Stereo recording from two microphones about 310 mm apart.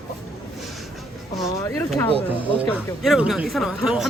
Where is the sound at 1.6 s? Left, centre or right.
Centre.